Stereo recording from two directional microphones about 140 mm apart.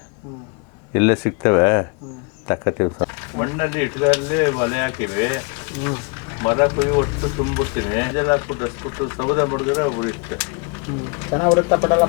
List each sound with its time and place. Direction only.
0.9 s speech: 20° left (ahead or behind)
6.4 s speech: 20° left (ahead or behind)